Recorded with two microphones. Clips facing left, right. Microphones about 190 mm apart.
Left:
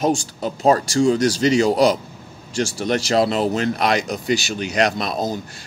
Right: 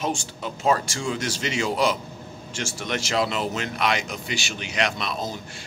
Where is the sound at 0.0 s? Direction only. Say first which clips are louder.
Left 8 dB; 40° left (ahead or behind).